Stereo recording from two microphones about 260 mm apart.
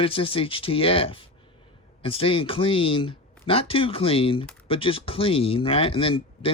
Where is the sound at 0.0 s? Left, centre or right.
Left.